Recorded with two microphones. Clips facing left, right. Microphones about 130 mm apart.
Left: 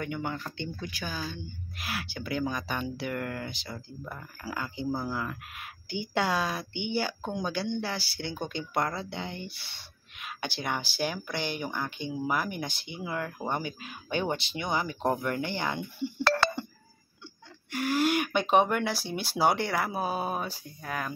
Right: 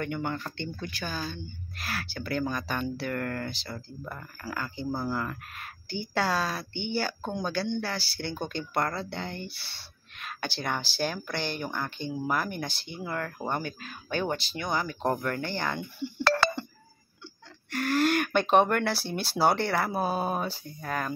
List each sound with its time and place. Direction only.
0.0 s speech: 5° left (ahead or behind)
4.9 s speech: 5° left (ahead or behind)
9.5 s a sound: 15° left (ahead or behind)
11.0 s speech: 10° left (ahead or behind)
15.0 s speech: 5° left (ahead or behind)
15.2 s speech: 15° left (ahead or behind)
17.6 s speech: 10° left (ahead or behind)